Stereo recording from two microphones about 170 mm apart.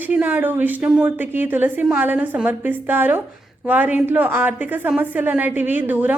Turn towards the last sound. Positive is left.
turn(degrees=-10)  # may be behind; listen again after turning